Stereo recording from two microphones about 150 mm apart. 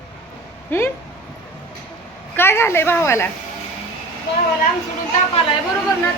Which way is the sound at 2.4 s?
15° left (ahead or behind).